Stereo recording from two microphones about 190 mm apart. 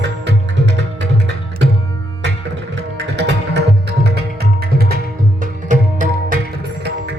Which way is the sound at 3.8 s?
55° right (ahead or behind).